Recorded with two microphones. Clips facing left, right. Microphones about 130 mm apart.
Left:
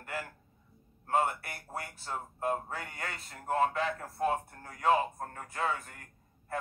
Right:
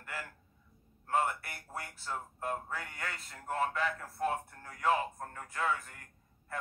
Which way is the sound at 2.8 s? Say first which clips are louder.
Left 1 dB; 30° left (ahead or behind).